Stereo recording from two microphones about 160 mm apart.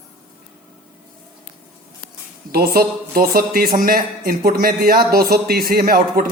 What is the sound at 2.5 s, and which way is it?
A man's voice, 65° right (ahead or behind).